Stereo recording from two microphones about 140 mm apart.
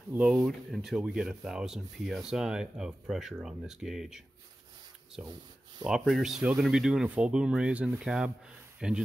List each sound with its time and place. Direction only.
0.1 s speech: 5° right (ahead or behind)
5.2 s speech: 30° right (ahead or behind)
5.9 s speech: 5° right (ahead or behind)